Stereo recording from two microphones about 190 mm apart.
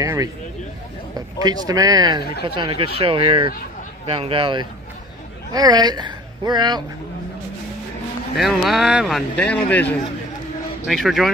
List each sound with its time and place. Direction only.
0.0 s speech: 20° right (ahead or behind)
1.4 s speech: 20° right (ahead or behind)
8.4 s a man's voice: centre (ahead or behind)